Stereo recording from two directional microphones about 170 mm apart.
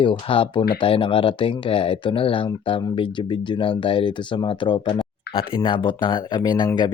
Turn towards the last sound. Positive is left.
turn(degrees=25)  # may be behind; listen again after turning